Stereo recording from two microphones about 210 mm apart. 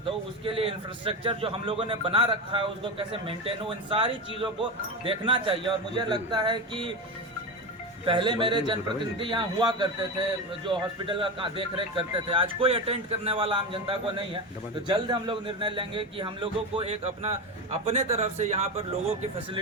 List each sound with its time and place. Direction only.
0.0 s a man's voice: 25° right (ahead or behind)
8.0 s a man's voice: 25° right (ahead or behind)